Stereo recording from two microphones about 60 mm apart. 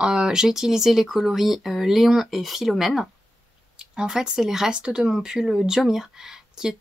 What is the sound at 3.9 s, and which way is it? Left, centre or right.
Speech, centre.